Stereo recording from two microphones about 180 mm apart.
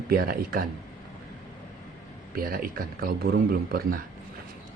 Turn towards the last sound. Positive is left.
turn(degrees=-55)  # may be behind; listen again after turning